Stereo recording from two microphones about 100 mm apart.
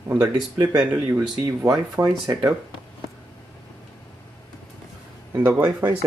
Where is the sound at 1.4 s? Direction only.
35° right (ahead or behind).